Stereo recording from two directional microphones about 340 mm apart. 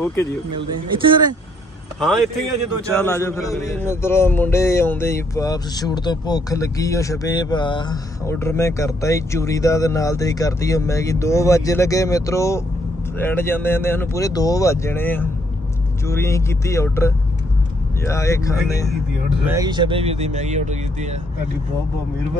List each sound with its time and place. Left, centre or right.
0.0 s a man's voice: centre
0.6 s speech: centre
2.9 s a man's voice: centre
19.4 s speech: centre